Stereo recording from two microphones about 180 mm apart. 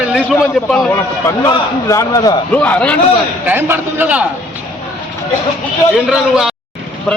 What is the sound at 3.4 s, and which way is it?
Speech, 10° right (ahead or behind).